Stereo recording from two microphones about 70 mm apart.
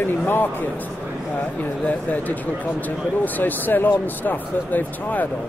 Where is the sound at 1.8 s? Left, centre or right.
Left.